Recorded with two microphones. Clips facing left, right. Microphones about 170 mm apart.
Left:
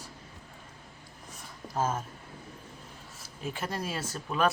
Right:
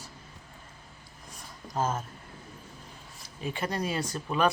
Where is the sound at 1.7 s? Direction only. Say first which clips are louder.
Even; 5° left (ahead or behind).